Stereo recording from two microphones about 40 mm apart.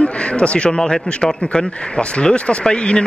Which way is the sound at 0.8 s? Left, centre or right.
Centre.